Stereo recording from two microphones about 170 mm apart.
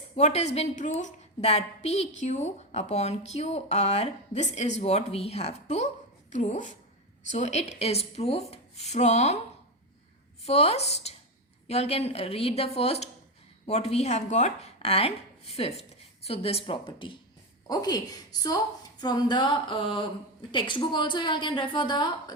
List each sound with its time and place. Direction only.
0.2 s a woman's voice: 40° left (ahead or behind)
10.4 s a woman's voice: 35° left (ahead or behind)